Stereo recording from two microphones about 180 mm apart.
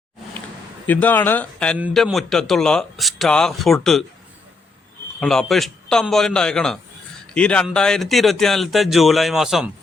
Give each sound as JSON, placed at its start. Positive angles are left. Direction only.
{"t": 0.9, "sound": "speech", "side_deg": 10}
{"t": 5.2, "sound": "speech", "side_deg": 0}